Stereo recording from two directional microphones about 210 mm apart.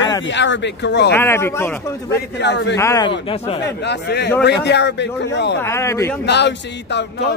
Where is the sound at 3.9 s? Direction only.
55° left (ahead or behind).